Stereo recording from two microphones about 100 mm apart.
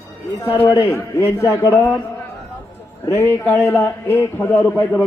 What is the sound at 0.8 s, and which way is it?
Speech, 30° left (ahead or behind).